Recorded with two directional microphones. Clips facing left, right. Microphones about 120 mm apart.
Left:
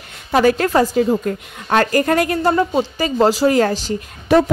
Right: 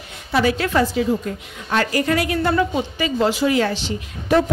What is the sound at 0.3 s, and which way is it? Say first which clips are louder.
A woman's voice: left 4 dB; 45° left (ahead or behind).